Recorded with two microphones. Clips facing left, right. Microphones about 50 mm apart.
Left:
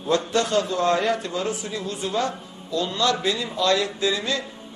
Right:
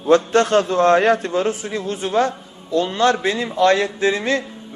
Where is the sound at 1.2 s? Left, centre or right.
Right.